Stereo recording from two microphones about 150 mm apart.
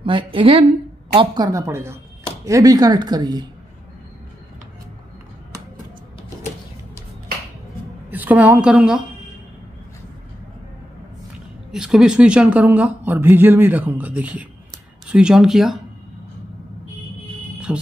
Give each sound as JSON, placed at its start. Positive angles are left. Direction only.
{"t": 0.0, "sound": "a woman's voice", "side_deg": -35}
{"t": 8.1, "sound": "speech", "side_deg": -10}
{"t": 11.7, "sound": "speech", "side_deg": -5}
{"t": 17.7, "sound": "speech", "side_deg": -5}